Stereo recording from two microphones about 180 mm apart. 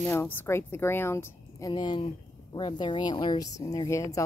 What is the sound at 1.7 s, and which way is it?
Speech, 25° left (ahead or behind).